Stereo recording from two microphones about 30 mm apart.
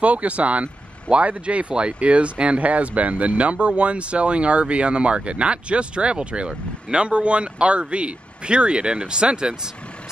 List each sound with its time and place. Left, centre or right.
0.0 s speech: right